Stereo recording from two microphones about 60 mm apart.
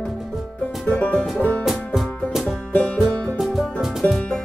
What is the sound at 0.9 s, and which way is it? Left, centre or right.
Music, left.